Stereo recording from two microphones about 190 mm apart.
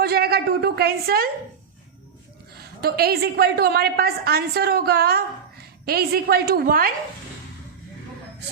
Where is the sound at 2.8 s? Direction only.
55° right (ahead or behind).